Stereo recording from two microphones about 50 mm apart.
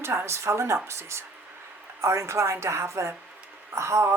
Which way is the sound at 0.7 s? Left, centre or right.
Right.